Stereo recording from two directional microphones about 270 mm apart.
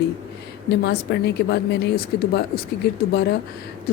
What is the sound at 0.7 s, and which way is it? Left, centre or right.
Speech, left.